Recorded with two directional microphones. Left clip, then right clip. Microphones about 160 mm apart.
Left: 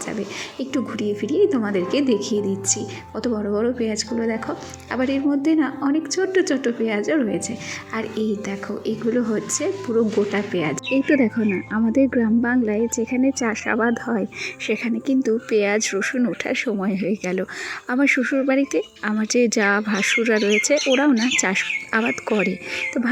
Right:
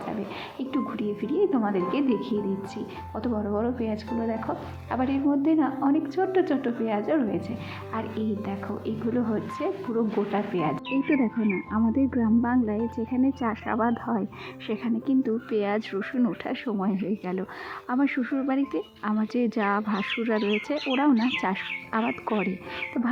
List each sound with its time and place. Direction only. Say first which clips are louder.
0.6 s speech: left 5 dB; 15° left (ahead or behind)
9.9 s speech: left 8 dB; 15° left (ahead or behind)